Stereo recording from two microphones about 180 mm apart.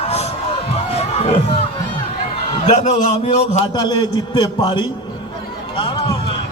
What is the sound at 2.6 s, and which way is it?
A man's voice, 40° left (ahead or behind).